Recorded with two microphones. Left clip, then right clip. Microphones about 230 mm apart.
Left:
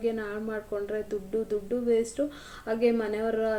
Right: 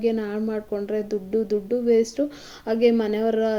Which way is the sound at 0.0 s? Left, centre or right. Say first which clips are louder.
Right 6 dB; right.